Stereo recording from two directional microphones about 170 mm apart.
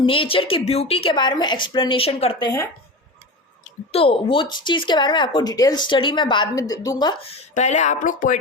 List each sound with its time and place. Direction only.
0.0 s speech: 30° left (ahead or behind)
2.4 s speech: 15° left (ahead or behind)
3.6 s speech: 35° left (ahead or behind)
7.5 s speech: 45° left (ahead or behind)